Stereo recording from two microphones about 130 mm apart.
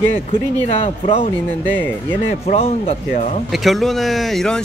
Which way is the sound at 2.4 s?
50° left (ahead or behind).